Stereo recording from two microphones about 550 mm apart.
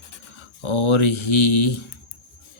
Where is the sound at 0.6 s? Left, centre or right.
Left.